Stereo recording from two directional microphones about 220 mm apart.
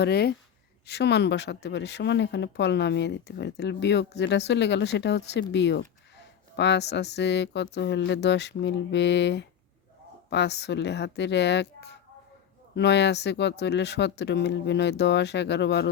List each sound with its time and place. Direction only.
0.0 s speech: 45° left (ahead or behind)